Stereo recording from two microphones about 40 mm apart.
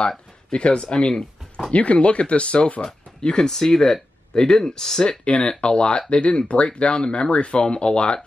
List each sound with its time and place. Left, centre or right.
0.5 s speech: left
5.2 s speech: left